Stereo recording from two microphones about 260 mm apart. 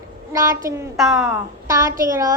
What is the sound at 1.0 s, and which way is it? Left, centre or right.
Speech, centre.